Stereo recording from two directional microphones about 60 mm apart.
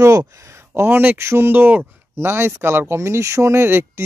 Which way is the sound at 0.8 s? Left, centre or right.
Right.